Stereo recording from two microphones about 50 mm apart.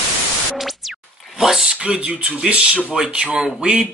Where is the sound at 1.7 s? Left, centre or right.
Centre.